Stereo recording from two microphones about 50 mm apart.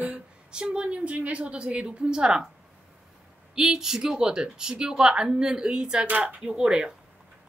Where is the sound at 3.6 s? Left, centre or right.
Centre.